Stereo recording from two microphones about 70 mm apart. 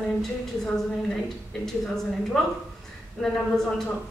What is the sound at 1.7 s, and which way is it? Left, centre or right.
A woman's voice, centre.